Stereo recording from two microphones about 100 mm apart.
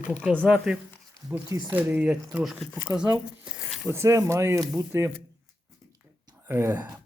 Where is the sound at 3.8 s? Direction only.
30° right (ahead or behind).